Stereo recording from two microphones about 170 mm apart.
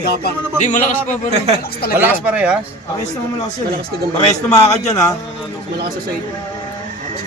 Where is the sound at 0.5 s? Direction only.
45° left (ahead or behind).